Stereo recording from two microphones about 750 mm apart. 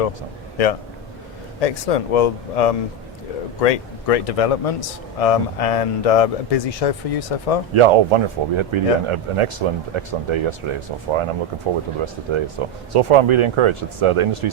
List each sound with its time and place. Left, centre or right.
1.6 s a man's voice: left
7.7 s speech: right